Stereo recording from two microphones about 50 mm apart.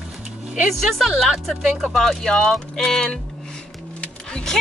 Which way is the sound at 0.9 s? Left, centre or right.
Centre.